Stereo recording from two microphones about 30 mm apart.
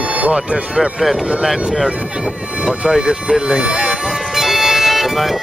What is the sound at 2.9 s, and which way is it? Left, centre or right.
Speech, right.